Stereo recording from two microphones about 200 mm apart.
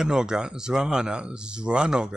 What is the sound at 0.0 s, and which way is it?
Speech, 5° right (ahead or behind).